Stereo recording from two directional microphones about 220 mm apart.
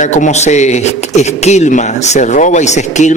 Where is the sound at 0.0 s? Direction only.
35° left (ahead or behind).